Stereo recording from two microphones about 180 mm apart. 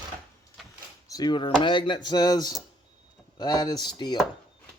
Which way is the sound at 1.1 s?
20° left (ahead or behind).